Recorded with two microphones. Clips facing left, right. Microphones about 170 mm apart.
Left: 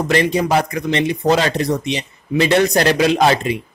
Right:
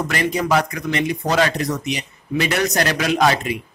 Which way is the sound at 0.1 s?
25° left (ahead or behind).